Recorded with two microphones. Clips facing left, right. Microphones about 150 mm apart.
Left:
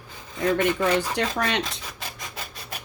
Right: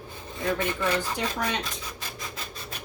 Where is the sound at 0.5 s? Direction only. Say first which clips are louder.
Left 5 dB; 90° left.